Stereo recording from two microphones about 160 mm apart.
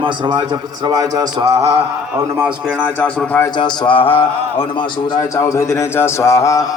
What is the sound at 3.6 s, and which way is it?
Speech, 30° left (ahead or behind).